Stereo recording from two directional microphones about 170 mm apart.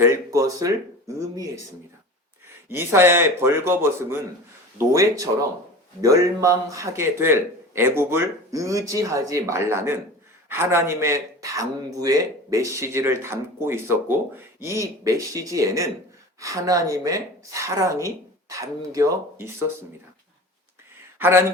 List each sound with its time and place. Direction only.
0.0 s a woman's voice: 15° right (ahead or behind)
2.6 s a woman's voice: 15° right (ahead or behind)
21.2 s speech: 15° right (ahead or behind)